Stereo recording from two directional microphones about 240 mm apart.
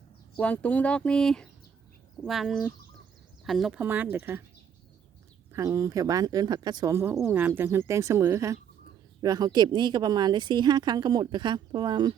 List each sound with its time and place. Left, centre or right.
0.3 s speech: centre
5.5 s speech: centre